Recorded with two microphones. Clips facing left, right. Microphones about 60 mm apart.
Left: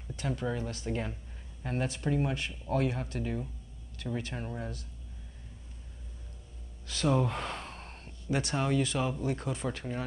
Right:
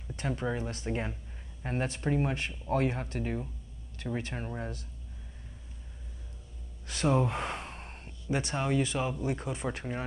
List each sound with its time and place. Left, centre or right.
0.3 s speech: right
6.9 s speech: right
7.2 s gasp: centre
8.3 s speech: centre
9.7 s speech: right